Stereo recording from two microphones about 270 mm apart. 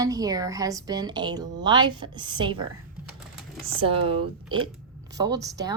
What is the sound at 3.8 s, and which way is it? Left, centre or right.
A woman's voice, centre.